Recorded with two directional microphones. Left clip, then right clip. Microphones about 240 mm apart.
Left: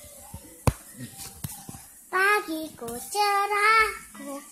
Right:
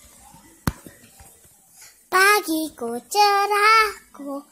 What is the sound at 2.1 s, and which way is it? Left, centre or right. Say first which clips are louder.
Child singing: right 6 dB; right.